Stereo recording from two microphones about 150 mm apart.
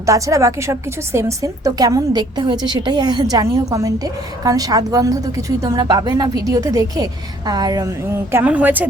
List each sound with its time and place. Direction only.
0.0 s a woman's voice: 20° right (ahead or behind)